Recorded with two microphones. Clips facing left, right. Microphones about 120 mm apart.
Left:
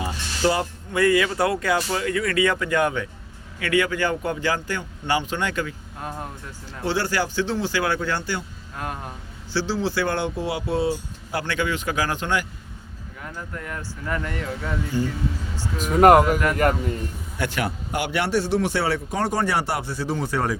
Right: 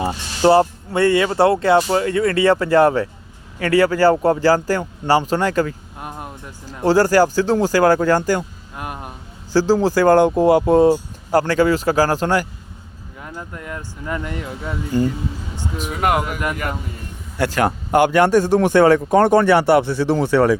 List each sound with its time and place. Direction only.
0.0 s speech: 35° right (ahead or behind)
6.0 s speech: 15° right (ahead or behind)
6.8 s speech: 40° right (ahead or behind)
8.7 s speech: 15° right (ahead or behind)
9.5 s speech: 45° right (ahead or behind)
13.2 s speech: 20° right (ahead or behind)
15.8 s speech: 40° left (ahead or behind)
17.3 s a man's voice: 40° right (ahead or behind)
17.6 s speech: 55° right (ahead or behind); by 20.6 s 85° right